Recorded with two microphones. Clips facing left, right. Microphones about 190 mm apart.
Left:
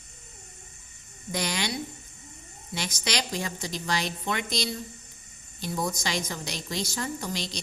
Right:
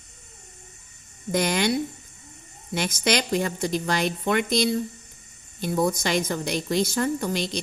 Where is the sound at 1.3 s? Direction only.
55° right (ahead or behind).